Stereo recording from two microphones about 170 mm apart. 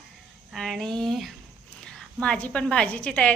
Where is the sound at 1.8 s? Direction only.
5° left (ahead or behind).